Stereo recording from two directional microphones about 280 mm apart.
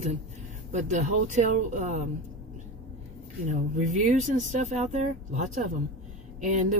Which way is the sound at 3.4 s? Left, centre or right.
Right.